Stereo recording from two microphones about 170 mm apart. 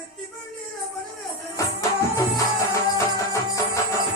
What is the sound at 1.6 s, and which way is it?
Music, 20° left (ahead or behind).